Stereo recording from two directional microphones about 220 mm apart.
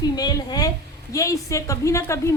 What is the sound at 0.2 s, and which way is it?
A woman's voice, 20° left (ahead or behind).